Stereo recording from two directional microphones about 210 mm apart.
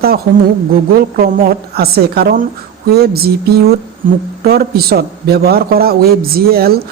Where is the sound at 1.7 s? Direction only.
50° right (ahead or behind).